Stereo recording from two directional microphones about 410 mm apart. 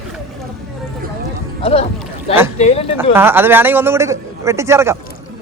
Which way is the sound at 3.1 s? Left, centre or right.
Centre.